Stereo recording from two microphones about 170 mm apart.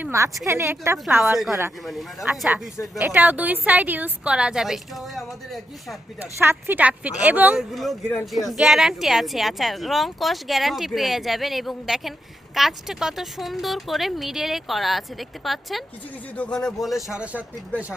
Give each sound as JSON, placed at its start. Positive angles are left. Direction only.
{"t": 0.0, "sound": "a sound", "side_deg": -15}
{"t": 0.4, "sound": "a woman's voice", "side_deg": -15}
{"t": 1.2, "sound": "a woman's voice", "side_deg": 0}
{"t": 6.4, "sound": "a woman's voice", "side_deg": -15}